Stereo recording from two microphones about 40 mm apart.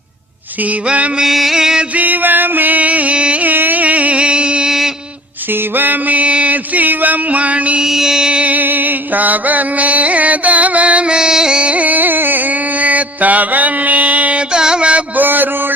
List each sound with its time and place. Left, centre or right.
0.9 s mantra: right
1.2 s mantra: centre
2.0 s music: right
3.4 s music: right
4.2 s music: right
5.7 s mantra: right
7.8 s mantra: centre
8.3 s music: right
8.5 s music: right; by 11.6 s centre
11.6 s music: right
14.5 s music: centre
15.1 s a sound: right